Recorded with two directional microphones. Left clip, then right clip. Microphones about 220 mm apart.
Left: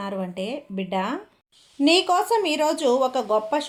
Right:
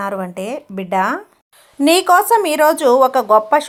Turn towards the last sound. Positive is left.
turn(degrees=-15)  # may be behind; listen again after turning